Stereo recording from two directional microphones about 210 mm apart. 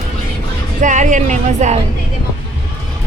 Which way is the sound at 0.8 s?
35° right (ahead or behind).